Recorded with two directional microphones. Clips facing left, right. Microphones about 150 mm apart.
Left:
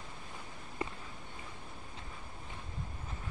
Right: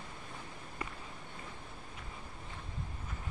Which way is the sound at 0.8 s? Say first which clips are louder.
Left 4 dB; 30° left (ahead or behind).